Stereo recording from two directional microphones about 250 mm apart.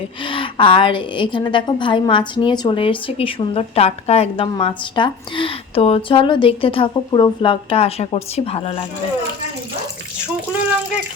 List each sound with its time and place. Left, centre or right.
0.3 s a woman's voice: centre